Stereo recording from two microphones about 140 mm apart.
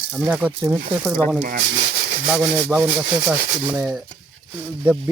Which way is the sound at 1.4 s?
65° right (ahead or behind).